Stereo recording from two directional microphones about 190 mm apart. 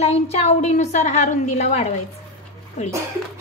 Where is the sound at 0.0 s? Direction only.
35° left (ahead or behind).